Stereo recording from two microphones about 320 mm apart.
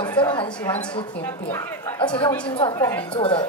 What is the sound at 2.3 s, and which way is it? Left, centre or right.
Speech, centre.